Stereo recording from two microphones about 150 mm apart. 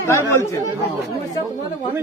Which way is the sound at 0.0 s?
20° left (ahead or behind).